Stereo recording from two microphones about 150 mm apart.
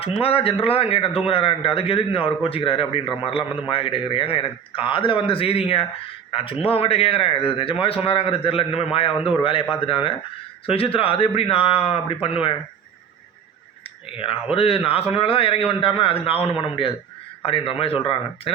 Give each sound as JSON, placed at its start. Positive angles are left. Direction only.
{"t": 0.0, "sound": "a man's voice", "side_deg": 40}
{"t": 14.5, "sound": "a man's voice", "side_deg": 40}